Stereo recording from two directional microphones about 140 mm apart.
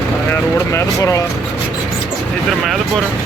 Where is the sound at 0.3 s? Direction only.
20° left (ahead or behind).